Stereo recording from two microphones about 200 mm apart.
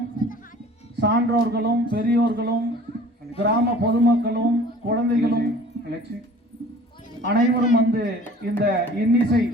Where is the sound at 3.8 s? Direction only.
55° right (ahead or behind).